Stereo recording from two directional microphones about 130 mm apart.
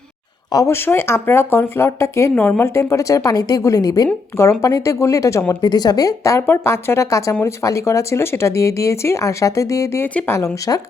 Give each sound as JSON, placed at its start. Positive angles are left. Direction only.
{"t": 0.5, "sound": "speech", "side_deg": 20}